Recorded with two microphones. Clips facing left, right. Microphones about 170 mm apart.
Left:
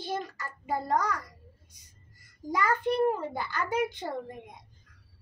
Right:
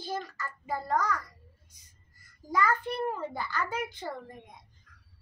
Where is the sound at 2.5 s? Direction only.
15° left (ahead or behind).